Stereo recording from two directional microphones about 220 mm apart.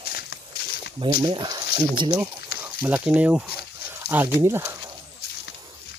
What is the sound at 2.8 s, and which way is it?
Speech, 5° right (ahead or behind).